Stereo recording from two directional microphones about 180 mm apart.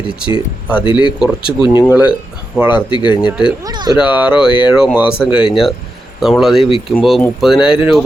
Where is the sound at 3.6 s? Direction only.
20° right (ahead or behind).